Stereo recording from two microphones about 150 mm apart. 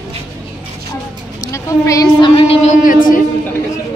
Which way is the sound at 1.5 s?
20° left (ahead or behind).